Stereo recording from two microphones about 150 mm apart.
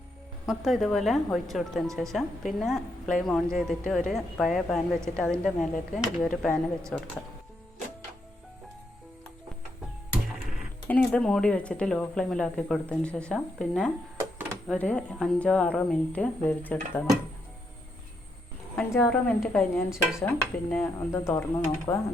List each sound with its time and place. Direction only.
0.4 s speech: centre (ahead or behind)
10.8 s speech: 10° left (ahead or behind)
18.9 s speech: 10° left (ahead or behind)
19.5 s speech: centre (ahead or behind)
20.2 s speech: 10° left (ahead or behind)